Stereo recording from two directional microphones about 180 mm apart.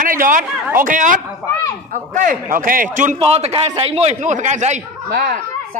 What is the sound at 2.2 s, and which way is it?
Speech, 50° right (ahead or behind).